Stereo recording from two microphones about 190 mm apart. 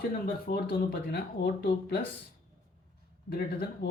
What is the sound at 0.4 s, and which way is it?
Speech, 55° left (ahead or behind).